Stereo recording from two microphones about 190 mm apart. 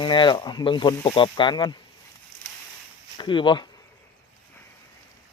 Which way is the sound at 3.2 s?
25° left (ahead or behind).